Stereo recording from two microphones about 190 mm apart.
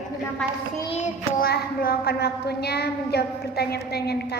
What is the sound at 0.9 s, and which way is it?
Child singing, 40° left (ahead or behind).